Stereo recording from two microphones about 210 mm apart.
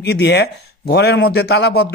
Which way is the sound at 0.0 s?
50° left (ahead or behind).